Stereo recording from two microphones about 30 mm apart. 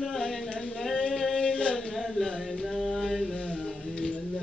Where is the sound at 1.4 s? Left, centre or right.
Left.